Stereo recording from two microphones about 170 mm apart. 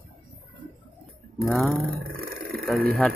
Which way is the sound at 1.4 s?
5° right (ahead or behind).